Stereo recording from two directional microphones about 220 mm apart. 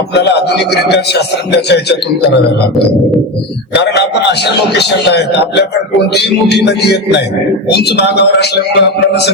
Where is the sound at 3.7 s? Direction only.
50° left (ahead or behind).